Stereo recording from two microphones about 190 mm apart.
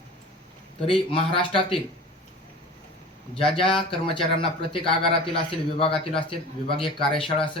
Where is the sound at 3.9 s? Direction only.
30° left (ahead or behind).